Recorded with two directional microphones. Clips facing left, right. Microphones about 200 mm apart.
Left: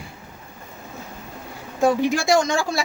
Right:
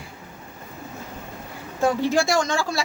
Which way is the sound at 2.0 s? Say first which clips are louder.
Left 2 dB; 15° left (ahead or behind).